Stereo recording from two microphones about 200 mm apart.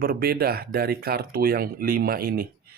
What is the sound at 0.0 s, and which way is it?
Speech, 50° right (ahead or behind).